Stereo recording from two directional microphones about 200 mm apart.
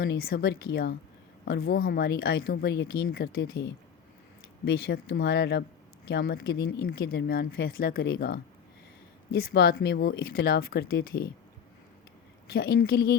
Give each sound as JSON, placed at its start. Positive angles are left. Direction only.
{"t": 0.0, "sound": "speech", "side_deg": 55}
{"t": 12.5, "sound": "speech", "side_deg": 50}